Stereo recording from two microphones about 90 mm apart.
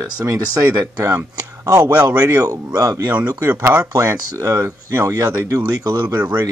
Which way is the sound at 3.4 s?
25° right (ahead or behind).